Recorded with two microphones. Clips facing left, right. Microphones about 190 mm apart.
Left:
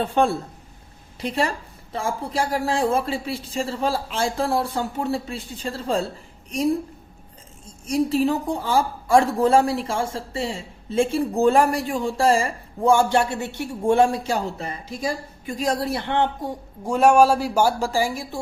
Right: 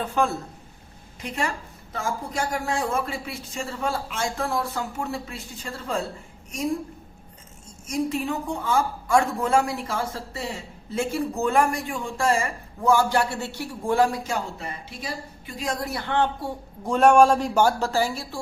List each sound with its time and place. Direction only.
0.0 s a woman's voice: 30° left (ahead or behind)
7.9 s a woman's voice: 35° left (ahead or behind)
14.8 s a woman's voice: 45° left (ahead or behind); by 18.3 s 15° left (ahead or behind)